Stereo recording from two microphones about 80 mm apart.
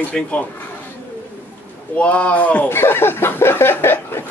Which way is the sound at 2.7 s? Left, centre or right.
Left.